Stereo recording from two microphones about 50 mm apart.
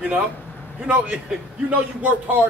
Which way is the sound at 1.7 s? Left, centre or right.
Right.